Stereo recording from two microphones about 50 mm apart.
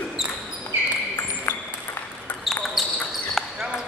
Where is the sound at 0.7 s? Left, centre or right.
Right.